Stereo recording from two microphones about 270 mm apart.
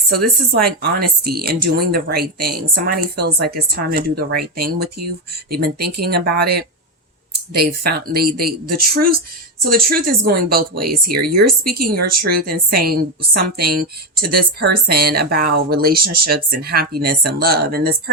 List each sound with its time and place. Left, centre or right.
0.5 s speech: right
7.5 s speech: right